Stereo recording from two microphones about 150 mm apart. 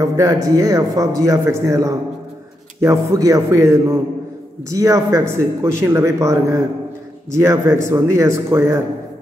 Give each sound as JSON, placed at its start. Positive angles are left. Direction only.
{"t": 0.0, "sound": "a man's voice", "side_deg": -20}